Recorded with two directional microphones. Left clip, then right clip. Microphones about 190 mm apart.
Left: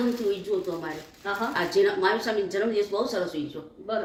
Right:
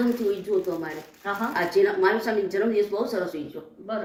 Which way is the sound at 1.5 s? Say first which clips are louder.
Right 2 dB; 30° left (ahead or behind).